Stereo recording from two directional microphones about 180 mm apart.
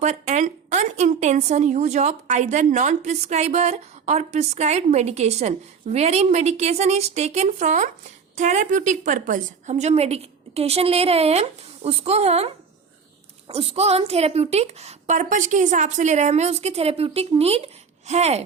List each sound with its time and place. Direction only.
0.0 s a woman's voice: 40° right (ahead or behind)
13.5 s a woman's voice: 35° right (ahead or behind)